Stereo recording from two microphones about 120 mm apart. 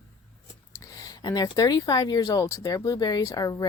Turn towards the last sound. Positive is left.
turn(degrees=30)  # may be behind; listen again after turning